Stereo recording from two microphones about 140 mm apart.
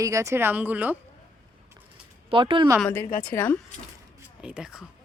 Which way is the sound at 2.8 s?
15° left (ahead or behind).